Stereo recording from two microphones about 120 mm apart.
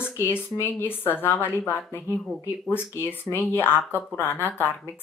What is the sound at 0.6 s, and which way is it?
A woman's voice, 20° left (ahead or behind).